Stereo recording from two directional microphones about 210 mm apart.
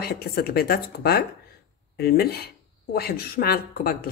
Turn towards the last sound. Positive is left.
turn(degrees=45)  # may be behind; listen again after turning